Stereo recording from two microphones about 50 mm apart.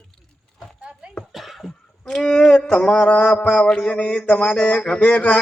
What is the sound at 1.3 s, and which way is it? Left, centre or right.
Cough, centre.